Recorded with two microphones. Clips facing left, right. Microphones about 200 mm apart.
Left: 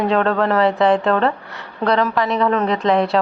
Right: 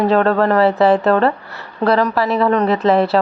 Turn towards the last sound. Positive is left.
turn(degrees=-5)  # may be behind; listen again after turning